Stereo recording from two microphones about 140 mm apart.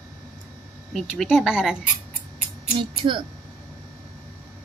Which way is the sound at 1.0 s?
Centre (ahead or behind).